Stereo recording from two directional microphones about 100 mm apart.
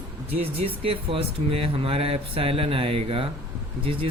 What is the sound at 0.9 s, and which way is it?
Speech, 70° right (ahead or behind).